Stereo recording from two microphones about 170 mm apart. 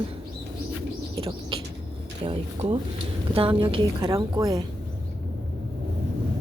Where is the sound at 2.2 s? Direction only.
35° right (ahead or behind); by 4.6 s 20° right (ahead or behind).